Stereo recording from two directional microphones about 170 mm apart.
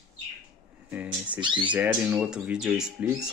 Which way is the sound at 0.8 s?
10° right (ahead or behind).